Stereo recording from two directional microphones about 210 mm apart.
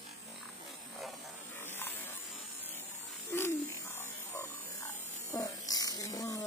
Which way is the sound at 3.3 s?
10° left (ahead or behind).